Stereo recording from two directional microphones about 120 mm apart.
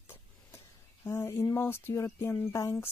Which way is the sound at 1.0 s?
20° left (ahead or behind).